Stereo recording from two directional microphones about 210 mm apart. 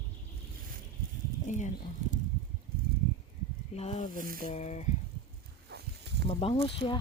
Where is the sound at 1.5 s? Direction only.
35° left (ahead or behind).